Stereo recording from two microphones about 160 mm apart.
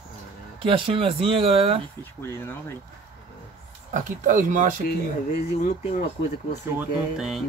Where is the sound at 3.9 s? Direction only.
50° right (ahead or behind).